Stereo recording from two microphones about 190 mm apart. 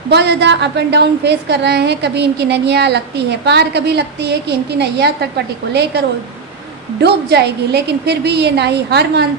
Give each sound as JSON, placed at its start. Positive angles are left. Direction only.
{"t": 0.1, "sound": "a woman's voice", "side_deg": -65}
{"t": 7.0, "sound": "a woman's voice", "side_deg": -60}